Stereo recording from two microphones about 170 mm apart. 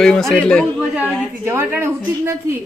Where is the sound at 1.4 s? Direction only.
15° right (ahead or behind).